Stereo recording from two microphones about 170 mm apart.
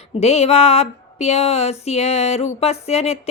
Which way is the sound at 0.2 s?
40° left (ahead or behind).